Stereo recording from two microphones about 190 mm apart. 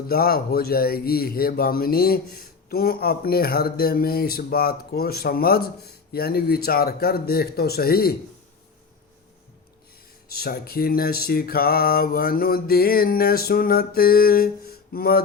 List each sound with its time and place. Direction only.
0.1 s speech: 55° left (ahead or behind)
10.2 s speech: 55° left (ahead or behind)